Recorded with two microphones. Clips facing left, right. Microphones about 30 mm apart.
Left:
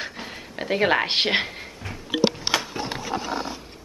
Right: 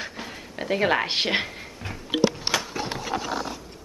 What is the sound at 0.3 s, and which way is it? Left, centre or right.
Speech, centre.